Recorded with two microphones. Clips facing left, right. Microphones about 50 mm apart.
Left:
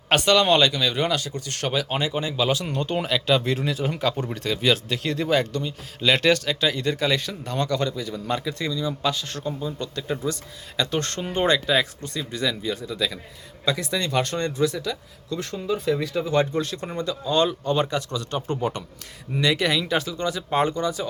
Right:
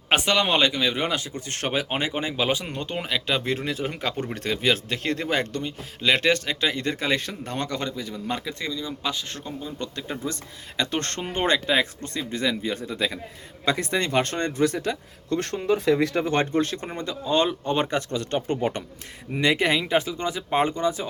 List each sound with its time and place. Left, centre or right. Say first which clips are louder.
0.1 s speech: left 3 dB; centre; by 5.7 s right
6.0 s speech: left 1 dB; centre
6.2 s speech: left 2 dB; right
12.0 s speech: even; right